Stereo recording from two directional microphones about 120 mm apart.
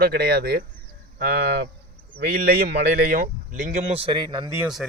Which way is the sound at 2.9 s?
90° right.